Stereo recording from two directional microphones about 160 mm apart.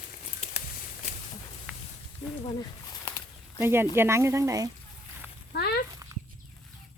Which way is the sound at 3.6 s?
15° right (ahead or behind).